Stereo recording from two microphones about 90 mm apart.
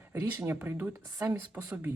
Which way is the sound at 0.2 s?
40° right (ahead or behind).